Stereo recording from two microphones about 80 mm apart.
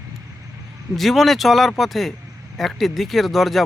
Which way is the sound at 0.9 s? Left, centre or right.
Centre.